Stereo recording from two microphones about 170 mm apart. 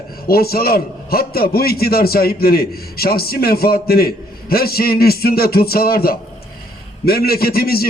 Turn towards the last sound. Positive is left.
turn(degrees=65)  # may be behind; listen again after turning